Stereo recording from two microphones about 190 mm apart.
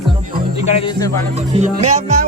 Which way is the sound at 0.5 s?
30° left (ahead or behind).